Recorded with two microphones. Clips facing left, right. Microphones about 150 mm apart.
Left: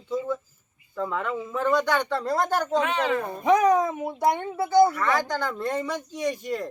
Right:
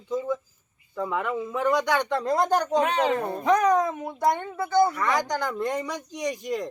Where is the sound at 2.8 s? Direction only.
40° right (ahead or behind).